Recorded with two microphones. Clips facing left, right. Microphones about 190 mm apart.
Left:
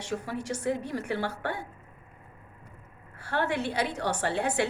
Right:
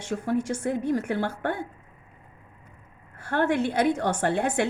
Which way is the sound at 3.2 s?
50° right (ahead or behind).